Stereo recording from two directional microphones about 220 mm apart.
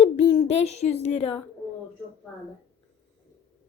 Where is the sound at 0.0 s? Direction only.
30° left (ahead or behind).